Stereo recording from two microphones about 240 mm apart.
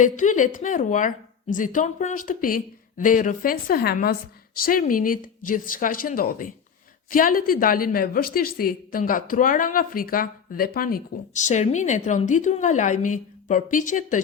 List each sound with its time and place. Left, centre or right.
0.0 s a woman's voice: left